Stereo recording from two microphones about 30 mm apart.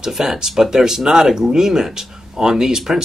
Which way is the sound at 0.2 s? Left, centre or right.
Centre.